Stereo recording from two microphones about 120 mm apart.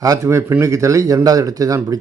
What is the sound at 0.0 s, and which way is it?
Speech, 25° right (ahead or behind).